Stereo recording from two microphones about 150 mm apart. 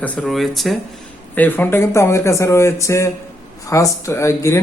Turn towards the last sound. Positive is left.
turn(degrees=20)  # may be behind; listen again after turning